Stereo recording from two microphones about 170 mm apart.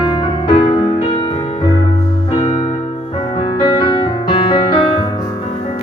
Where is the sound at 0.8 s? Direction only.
35° left (ahead or behind).